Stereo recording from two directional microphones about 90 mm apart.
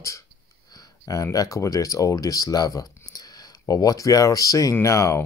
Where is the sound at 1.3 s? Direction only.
40° left (ahead or behind).